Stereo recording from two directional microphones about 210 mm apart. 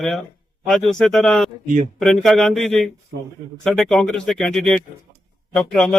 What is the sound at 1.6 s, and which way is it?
Speech, 35° right (ahead or behind).